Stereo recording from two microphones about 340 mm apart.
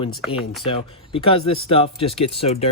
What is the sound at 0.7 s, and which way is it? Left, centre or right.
Speech, centre.